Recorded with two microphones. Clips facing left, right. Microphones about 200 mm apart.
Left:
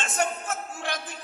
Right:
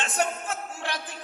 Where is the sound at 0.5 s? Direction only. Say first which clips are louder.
Left 1 dB; 45° left (ahead or behind).